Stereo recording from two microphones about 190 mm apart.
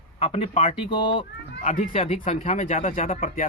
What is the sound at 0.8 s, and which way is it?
Speech, 25° left (ahead or behind).